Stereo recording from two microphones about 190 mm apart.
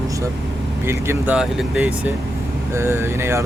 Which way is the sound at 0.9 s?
10° right (ahead or behind).